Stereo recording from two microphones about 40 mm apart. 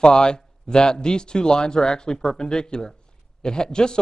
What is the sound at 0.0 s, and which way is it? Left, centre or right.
A man's voice, centre.